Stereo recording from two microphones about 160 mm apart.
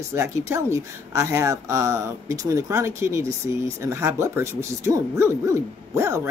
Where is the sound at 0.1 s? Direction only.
15° right (ahead or behind).